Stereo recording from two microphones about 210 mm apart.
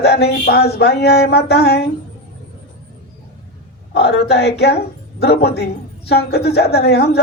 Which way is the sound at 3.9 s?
50° left (ahead or behind).